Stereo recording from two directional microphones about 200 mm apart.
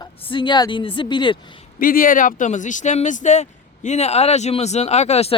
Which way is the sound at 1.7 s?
45° left (ahead or behind).